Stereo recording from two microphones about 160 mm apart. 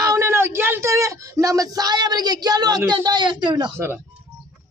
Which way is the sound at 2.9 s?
30° right (ahead or behind).